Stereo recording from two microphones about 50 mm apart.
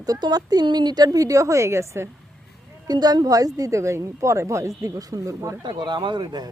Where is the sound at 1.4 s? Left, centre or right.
Right.